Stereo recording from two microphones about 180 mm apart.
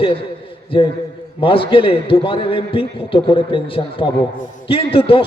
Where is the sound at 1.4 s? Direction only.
30° left (ahead or behind).